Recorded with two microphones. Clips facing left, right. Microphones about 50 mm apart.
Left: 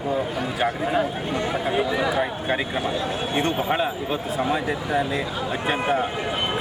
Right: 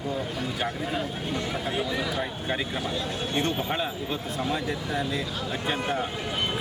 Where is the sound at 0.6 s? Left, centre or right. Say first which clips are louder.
Left 9 dB; centre.